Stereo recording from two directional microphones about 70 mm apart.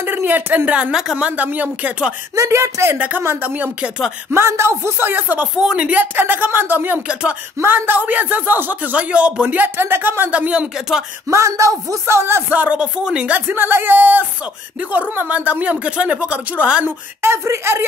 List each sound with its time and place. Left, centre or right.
0.0 s a woman's voice: right
2.3 s speech: right
3.0 s speech: right
4.3 s speech: right
5.6 s speech: centre
6.1 s speech: right
7.1 s speech: centre
7.6 s speech: right; by 11.1 s centre
11.2 s a sound: right
12.1 s speech: right
12.4 s speech: right
13.5 s speech: right
16.8 s speech: right